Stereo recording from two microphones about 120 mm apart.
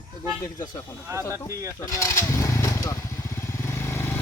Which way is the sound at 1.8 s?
25° left (ahead or behind).